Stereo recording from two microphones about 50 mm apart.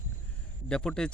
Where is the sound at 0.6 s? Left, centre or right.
Centre.